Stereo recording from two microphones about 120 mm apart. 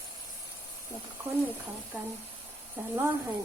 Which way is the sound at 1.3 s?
20° right (ahead or behind).